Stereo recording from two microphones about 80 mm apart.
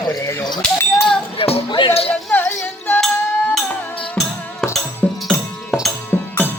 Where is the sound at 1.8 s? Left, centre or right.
Left.